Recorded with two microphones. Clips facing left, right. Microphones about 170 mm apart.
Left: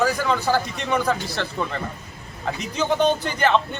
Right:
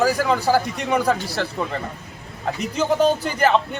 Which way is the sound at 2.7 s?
5° right (ahead or behind).